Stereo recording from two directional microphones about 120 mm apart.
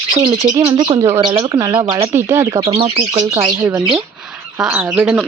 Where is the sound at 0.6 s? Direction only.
50° right (ahead or behind).